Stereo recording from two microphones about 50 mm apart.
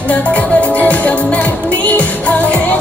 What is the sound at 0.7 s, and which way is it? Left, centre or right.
Music, left.